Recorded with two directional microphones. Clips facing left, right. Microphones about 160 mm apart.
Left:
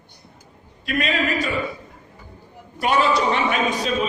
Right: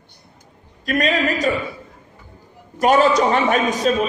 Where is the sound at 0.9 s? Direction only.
40° right (ahead or behind).